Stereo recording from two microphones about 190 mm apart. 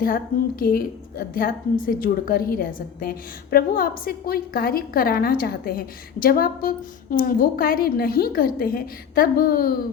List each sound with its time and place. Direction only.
0.0 s a woman's voice: 50° left (ahead or behind)